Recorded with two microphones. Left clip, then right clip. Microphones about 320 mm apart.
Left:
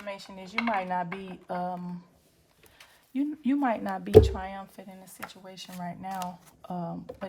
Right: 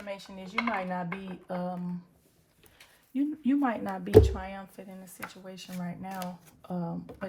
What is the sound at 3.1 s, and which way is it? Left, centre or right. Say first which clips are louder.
Speech: even; left.